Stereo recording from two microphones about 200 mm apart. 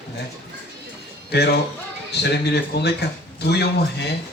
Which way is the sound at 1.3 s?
55° left (ahead or behind).